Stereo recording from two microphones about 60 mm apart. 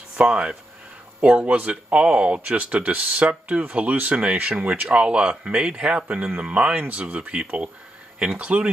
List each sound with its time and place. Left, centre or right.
0.2 s speech: centre